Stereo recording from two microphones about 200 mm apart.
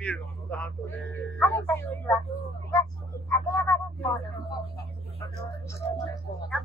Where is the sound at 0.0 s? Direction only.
5° left (ahead or behind).